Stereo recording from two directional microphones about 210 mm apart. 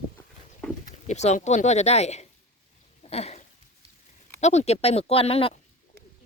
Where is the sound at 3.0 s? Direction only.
30° left (ahead or behind).